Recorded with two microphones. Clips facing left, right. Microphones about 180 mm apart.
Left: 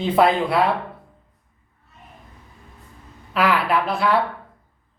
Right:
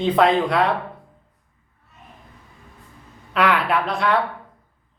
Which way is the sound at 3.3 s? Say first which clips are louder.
Even; 5° left (ahead or behind).